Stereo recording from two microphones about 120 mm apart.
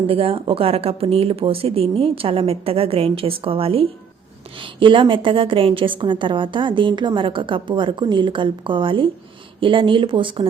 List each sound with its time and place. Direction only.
0.1 s a woman's voice: 50° right (ahead or behind)